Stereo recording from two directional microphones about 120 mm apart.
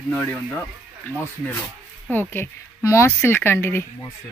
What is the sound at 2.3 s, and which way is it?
Speech, 20° left (ahead or behind).